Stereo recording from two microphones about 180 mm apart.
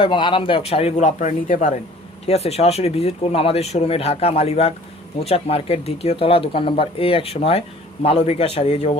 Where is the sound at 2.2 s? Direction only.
35° left (ahead or behind).